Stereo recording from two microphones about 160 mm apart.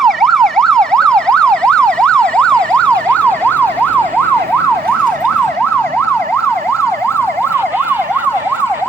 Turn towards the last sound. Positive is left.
turn(degrees=15)  # may be behind; listen again after turning